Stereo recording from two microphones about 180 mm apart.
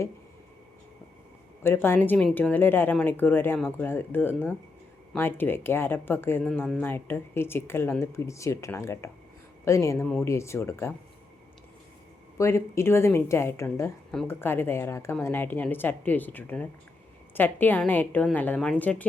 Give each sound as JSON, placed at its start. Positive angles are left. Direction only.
{"t": 1.6, "sound": "a woman's voice", "side_deg": 10}
{"t": 12.4, "sound": "a woman's voice", "side_deg": 15}